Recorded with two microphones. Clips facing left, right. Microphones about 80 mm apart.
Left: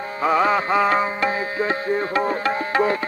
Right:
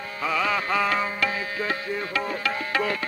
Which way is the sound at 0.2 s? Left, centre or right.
Left.